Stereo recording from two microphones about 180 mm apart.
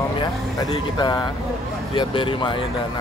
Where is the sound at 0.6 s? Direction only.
20° left (ahead or behind).